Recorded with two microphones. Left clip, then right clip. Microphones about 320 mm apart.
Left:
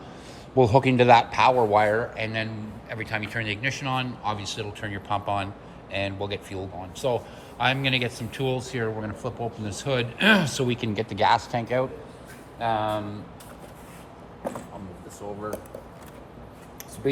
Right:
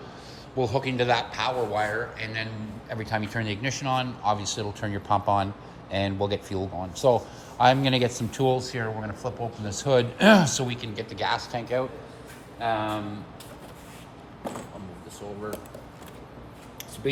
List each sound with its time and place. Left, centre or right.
0.6 s a man's voice: centre
2.9 s speech: centre
10.8 s a man's voice: centre